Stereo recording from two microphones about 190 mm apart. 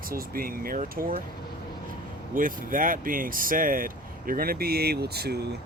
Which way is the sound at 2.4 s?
45° right (ahead or behind).